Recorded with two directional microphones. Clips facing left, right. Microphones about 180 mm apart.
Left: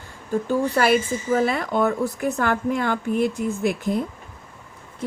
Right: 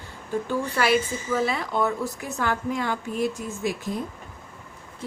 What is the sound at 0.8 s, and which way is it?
A woman's voice, 50° left (ahead or behind).